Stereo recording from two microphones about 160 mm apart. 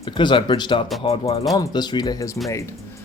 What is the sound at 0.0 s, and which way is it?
Speech, 30° left (ahead or behind).